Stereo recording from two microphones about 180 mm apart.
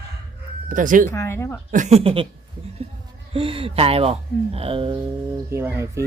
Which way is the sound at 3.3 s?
30° right (ahead or behind).